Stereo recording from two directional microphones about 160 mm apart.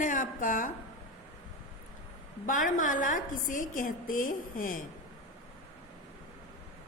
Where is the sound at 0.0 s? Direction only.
55° left (ahead or behind).